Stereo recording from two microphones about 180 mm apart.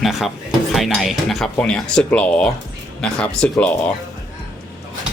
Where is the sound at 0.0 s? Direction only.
Centre (ahead or behind).